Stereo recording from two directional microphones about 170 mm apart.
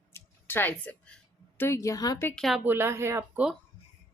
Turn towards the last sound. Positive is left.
turn(degrees=-15)  # may be behind; listen again after turning